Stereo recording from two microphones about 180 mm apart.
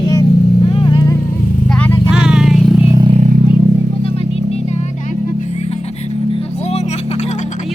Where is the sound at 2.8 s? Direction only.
20° right (ahead or behind).